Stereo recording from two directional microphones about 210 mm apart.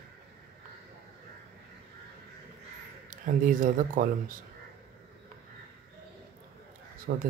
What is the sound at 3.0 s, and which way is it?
Speech, 40° right (ahead or behind).